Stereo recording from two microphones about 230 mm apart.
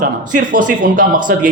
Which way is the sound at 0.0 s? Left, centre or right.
Right.